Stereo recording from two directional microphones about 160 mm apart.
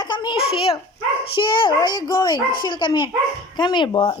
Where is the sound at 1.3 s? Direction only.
30° left (ahead or behind).